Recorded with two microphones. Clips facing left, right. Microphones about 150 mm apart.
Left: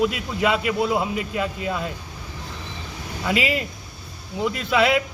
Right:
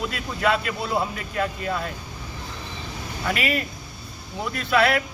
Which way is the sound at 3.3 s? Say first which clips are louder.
Left 3 dB; 20° left (ahead or behind).